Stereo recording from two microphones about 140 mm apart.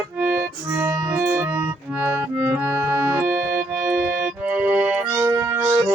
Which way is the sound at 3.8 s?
10° right (ahead or behind).